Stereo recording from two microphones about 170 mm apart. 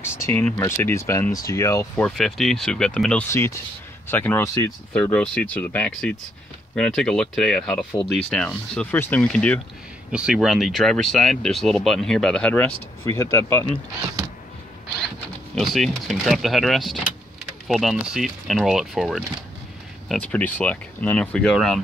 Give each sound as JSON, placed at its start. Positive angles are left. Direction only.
{"t": 0.0, "sound": "speech", "side_deg": 15}
{"t": 2.0, "sound": "speech", "side_deg": 0}
{"t": 15.5, "sound": "speech", "side_deg": 0}